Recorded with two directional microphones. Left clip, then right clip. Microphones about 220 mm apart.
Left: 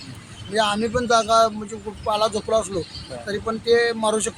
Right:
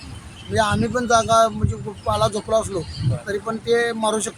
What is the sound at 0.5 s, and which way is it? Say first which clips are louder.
Speech: right 1 dB; 5° left (ahead or behind).